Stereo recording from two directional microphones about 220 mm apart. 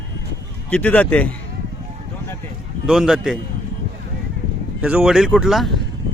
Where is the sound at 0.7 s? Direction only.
5° left (ahead or behind).